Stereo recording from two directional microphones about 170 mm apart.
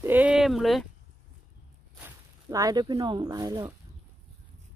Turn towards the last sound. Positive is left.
turn(degrees=-25)  # may be behind; listen again after turning